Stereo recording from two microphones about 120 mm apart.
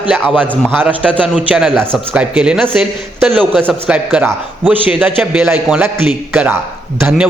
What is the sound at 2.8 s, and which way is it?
Speech, 5° left (ahead or behind).